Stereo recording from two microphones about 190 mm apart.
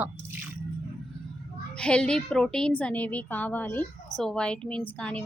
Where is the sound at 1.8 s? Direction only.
5° left (ahead or behind).